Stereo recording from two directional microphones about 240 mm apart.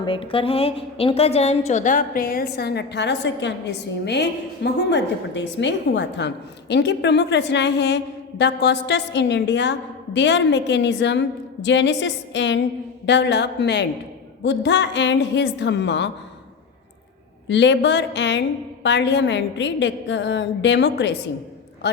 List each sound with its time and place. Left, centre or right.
0.0 s a woman's voice: left
17.5 s a woman's voice: left